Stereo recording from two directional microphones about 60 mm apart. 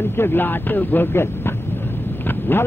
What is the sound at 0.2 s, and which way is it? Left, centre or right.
Speech, left.